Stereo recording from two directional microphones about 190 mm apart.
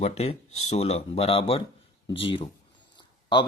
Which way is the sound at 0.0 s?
35° left (ahead or behind).